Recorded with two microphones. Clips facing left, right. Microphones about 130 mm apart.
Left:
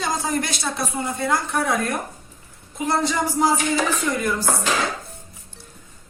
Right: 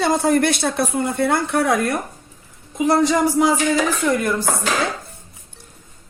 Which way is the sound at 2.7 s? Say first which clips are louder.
Right 6 dB; 85° right.